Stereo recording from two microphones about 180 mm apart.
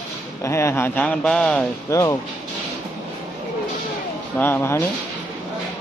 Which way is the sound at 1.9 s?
20° left (ahead or behind).